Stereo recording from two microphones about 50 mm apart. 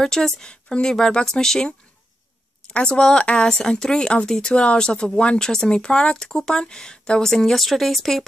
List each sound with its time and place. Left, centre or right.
0.0 s speech: centre
2.7 s speech: centre
7.6 s speech: centre